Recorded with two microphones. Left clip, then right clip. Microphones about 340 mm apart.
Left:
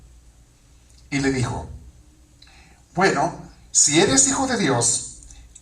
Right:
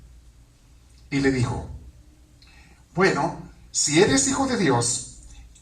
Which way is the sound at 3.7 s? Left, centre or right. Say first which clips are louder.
Left 2 dB; left.